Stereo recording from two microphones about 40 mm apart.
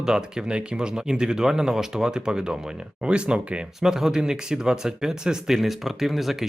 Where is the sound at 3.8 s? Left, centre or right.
Centre.